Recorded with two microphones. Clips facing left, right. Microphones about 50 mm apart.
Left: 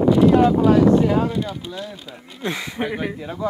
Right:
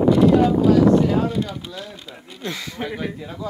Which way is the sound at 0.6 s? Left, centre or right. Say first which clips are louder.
Even; left.